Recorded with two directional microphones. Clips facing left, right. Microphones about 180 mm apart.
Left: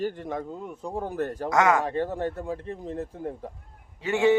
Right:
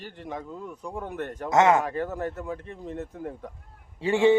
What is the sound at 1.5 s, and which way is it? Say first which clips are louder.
Speech: right 2 dB; 25° right (ahead or behind).